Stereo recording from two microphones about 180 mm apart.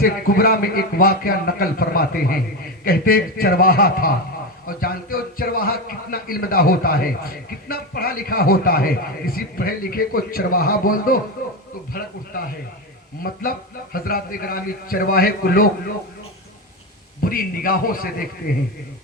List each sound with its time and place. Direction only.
0.0 s a man's voice: 55° left (ahead or behind)
13.2 s a man's voice: 55° left (ahead or behind)
17.2 s a man's voice: 55° left (ahead or behind)